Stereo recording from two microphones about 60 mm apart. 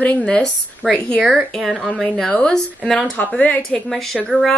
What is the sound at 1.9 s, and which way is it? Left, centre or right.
Speech, centre.